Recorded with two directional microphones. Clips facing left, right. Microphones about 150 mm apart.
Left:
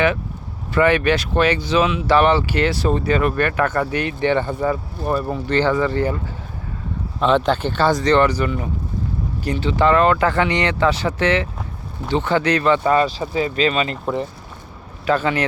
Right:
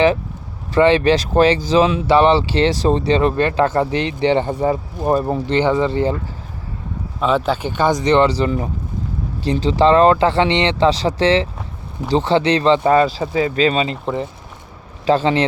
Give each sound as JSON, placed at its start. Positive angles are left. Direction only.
{"t": 0.7, "sound": "speech", "side_deg": -30}
{"t": 7.2, "sound": "speech", "side_deg": -5}
{"t": 13.9, "sound": "speech", "side_deg": 0}
{"t": 15.0, "sound": "speech", "side_deg": -30}